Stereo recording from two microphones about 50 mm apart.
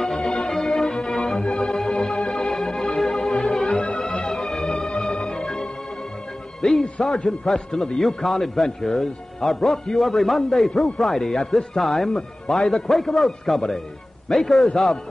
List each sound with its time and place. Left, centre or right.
0.0 s music: centre
1.4 s organ: centre
6.6 s music: centre
7.2 s a man's voice: centre